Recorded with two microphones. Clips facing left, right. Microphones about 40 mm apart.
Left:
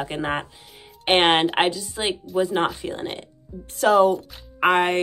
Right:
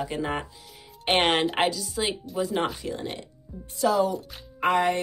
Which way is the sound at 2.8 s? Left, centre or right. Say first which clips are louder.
Left 3 dB; left.